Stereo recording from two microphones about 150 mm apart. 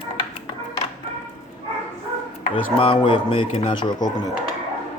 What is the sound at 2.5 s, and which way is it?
Speech, 35° left (ahead or behind).